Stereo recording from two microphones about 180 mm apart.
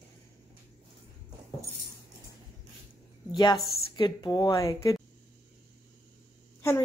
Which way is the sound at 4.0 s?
25° left (ahead or behind).